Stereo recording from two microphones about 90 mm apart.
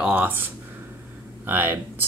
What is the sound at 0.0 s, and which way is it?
Speech, 20° right (ahead or behind).